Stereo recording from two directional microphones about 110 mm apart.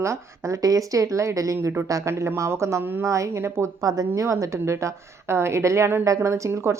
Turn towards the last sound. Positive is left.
turn(degrees=-25)  # may be behind; listen again after turning